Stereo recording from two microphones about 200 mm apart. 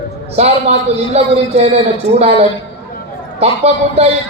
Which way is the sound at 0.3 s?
30° right (ahead or behind).